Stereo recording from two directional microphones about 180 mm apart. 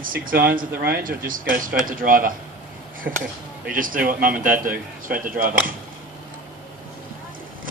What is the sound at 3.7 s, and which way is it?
Speech, 50° right (ahead or behind).